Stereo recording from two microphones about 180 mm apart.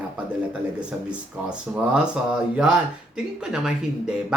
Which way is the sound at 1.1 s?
5° right (ahead or behind).